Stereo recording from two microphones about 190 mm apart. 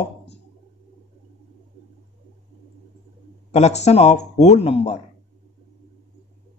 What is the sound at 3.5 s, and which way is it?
Speech, 35° left (ahead or behind).